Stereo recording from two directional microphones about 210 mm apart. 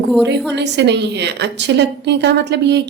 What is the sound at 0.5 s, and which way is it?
A woman's voice, 55° right (ahead or behind).